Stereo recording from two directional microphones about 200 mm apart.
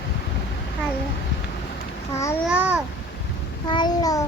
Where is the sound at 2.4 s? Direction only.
5° right (ahead or behind).